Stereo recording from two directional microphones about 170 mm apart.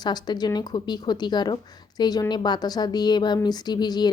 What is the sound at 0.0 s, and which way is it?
A woman's voice, 25° left (ahead or behind).